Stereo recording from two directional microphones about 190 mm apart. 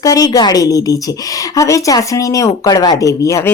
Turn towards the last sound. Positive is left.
turn(degrees=15)  # may be behind; listen again after turning